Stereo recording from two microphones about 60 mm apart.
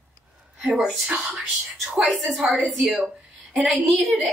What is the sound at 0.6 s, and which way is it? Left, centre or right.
Speech, centre.